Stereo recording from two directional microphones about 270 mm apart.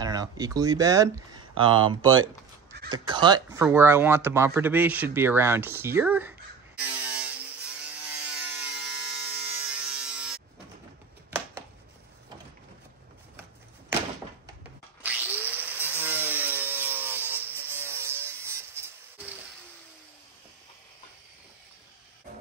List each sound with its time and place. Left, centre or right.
0.0 s speech: centre
6.8 s a sound: centre
7.9 s wood: centre
15.0 s tools: centre